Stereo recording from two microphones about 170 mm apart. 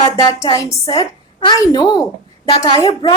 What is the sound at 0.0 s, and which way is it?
A woman's voice, 20° left (ahead or behind).